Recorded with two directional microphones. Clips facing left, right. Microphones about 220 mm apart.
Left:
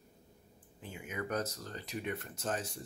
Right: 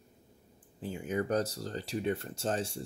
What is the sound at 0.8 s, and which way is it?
Speech, 35° right (ahead or behind).